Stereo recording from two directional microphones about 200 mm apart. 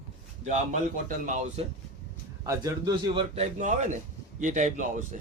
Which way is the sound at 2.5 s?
20° right (ahead or behind).